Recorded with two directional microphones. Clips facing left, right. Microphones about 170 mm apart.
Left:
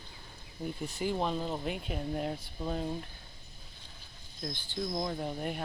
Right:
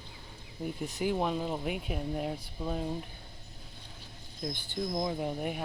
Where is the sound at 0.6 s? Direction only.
5° right (ahead or behind).